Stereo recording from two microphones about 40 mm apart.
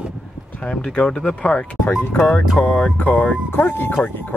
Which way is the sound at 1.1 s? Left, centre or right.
Left.